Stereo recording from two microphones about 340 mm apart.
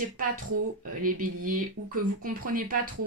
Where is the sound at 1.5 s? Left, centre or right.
Right.